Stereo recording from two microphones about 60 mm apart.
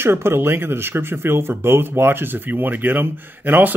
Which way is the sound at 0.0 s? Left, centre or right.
Right.